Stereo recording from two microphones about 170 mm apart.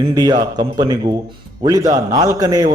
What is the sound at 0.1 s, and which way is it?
A man's voice, 25° right (ahead or behind).